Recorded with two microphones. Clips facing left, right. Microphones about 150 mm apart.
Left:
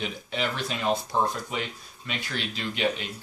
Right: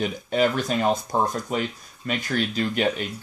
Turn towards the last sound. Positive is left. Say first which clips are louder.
# right 5 dB
turn(degrees=-45)  # may be behind; listen again after turning